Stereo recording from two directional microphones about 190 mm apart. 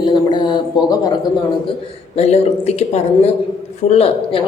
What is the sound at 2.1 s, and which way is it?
A woman's voice, 35° left (ahead or behind).